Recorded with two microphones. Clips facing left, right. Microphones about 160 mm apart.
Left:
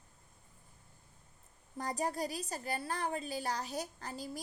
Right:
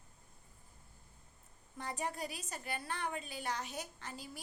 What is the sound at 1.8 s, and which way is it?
A woman's voice, 40° left (ahead or behind).